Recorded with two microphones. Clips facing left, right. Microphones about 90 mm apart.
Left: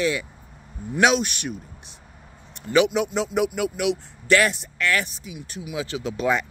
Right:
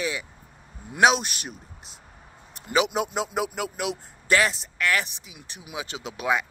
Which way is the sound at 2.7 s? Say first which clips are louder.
Left 4 dB; 20° right (ahead or behind).